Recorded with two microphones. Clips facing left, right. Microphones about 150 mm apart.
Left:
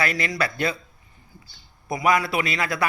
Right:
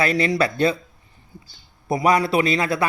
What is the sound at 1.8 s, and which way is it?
Speech, 30° right (ahead or behind).